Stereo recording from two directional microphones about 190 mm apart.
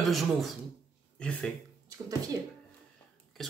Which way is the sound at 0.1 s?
Centre (ahead or behind).